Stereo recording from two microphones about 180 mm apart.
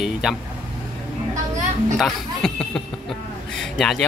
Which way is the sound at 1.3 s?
45° right (ahead or behind).